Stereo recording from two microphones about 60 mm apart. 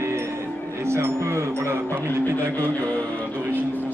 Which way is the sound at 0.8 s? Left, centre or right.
Right.